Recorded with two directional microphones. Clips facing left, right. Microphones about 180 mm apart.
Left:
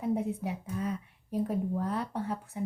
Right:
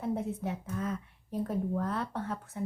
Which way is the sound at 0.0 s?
15° left (ahead or behind).